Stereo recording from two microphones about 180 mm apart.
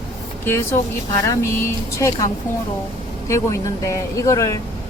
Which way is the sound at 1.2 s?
15° left (ahead or behind).